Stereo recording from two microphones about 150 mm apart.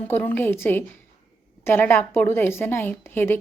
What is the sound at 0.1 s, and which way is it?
Speech, 10° left (ahead or behind).